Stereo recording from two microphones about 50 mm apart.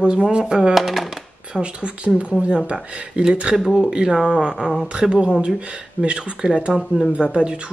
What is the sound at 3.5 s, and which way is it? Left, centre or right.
Speech, centre.